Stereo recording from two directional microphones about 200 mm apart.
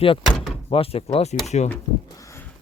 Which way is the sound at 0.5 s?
30° left (ahead or behind).